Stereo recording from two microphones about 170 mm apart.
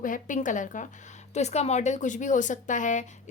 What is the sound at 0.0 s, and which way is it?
A woman's voice, 50° left (ahead or behind).